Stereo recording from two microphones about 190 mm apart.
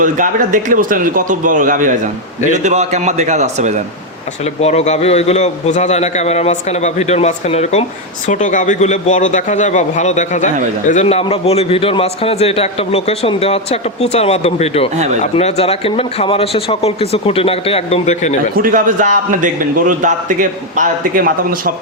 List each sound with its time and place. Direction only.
0.0 s a man's voice: 45° right (ahead or behind)
4.6 s a man's voice: 35° left (ahead or behind)
14.9 s a man's voice: 35° right (ahead or behind)
15.2 s a man's voice: 35° left (ahead or behind)
18.5 s a man's voice: 45° right (ahead or behind)